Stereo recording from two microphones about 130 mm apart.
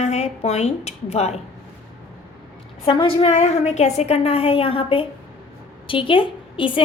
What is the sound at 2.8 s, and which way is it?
A woman's voice, 40° left (ahead or behind).